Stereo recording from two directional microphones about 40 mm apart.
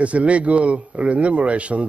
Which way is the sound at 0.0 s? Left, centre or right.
Right.